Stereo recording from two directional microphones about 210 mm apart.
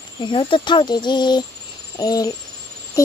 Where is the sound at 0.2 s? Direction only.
20° left (ahead or behind).